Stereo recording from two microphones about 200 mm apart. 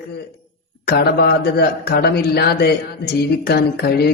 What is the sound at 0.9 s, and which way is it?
Speech, 50° left (ahead or behind).